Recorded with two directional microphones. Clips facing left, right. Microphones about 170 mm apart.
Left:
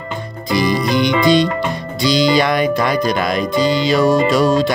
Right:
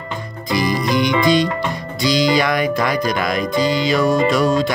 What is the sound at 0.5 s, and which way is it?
Music, 25° left (ahead or behind).